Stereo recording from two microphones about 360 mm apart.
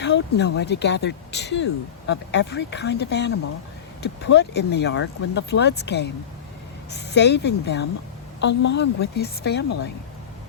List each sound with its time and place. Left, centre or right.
0.0 s speech: left